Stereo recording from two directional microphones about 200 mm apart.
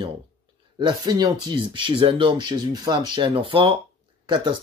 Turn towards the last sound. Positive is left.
turn(degrees=-25)  # may be behind; listen again after turning